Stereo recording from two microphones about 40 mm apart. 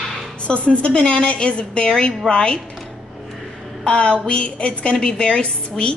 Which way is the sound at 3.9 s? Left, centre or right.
Left.